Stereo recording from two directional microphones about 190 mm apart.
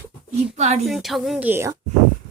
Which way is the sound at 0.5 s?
35° right (ahead or behind).